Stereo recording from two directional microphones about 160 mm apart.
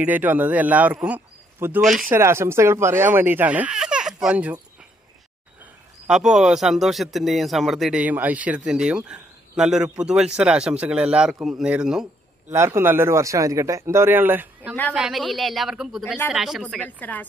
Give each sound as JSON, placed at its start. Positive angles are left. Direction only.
{"t": 0.0, "sound": "a man's voice", "side_deg": -10}
{"t": 2.0, "sound": "speech", "side_deg": -15}
{"t": 5.6, "sound": "a man's voice", "side_deg": -5}
{"t": 12.5, "sound": "a man's voice", "side_deg": -15}
{"t": 16.6, "sound": "a woman's voice", "side_deg": 10}